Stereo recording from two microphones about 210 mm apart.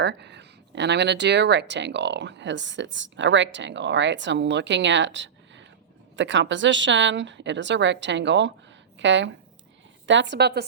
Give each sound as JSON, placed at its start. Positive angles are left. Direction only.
{"t": 0.0, "sound": "speech", "side_deg": -55}